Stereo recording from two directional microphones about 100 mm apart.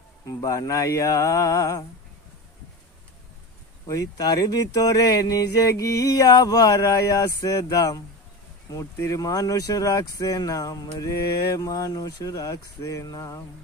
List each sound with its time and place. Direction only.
0.3 s speech: 35° left (ahead or behind)
3.8 s speech: 35° left (ahead or behind)